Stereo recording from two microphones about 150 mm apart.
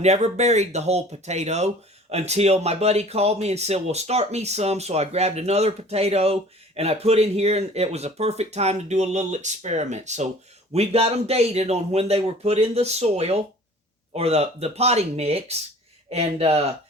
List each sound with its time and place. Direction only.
0.0 s speech: 50° right (ahead or behind)